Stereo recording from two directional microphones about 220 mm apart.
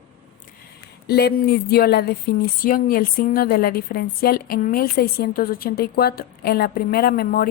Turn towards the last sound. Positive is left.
turn(degrees=45)  # may be behind; listen again after turning